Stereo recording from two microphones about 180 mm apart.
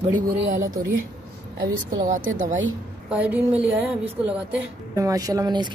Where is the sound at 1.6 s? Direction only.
45° right (ahead or behind).